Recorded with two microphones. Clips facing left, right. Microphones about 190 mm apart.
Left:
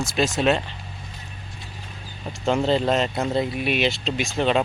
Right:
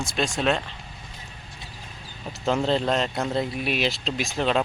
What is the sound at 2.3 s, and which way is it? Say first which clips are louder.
Speech: left 2 dB; centre (ahead or behind).